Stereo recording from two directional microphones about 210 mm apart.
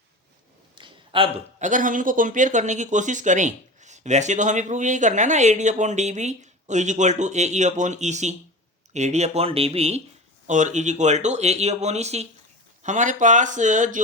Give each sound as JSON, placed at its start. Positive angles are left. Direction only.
{"t": 0.8, "sound": "a man's voice", "side_deg": -25}